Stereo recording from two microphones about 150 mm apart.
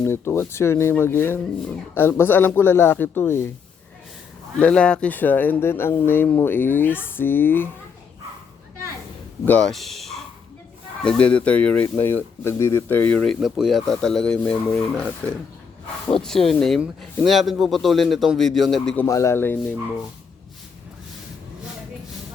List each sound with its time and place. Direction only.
0.0 s speech: 15° left (ahead or behind)
4.5 s speech: 5° left (ahead or behind)
9.5 s speech: 5° left (ahead or behind)
16.2 s a man's voice: 5° left (ahead or behind)
19.0 s speech: 20° left (ahead or behind)